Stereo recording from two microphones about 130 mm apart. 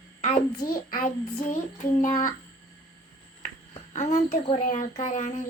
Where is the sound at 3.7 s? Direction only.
65° left (ahead or behind).